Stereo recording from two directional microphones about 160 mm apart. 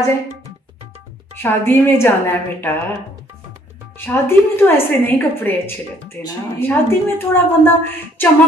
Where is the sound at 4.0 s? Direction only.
15° left (ahead or behind).